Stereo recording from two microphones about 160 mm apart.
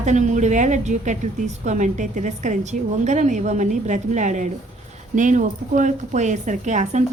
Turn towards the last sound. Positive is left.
turn(degrees=-50)  # may be behind; listen again after turning